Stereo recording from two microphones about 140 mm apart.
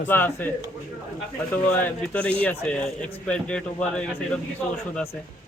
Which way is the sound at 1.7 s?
10° left (ahead or behind).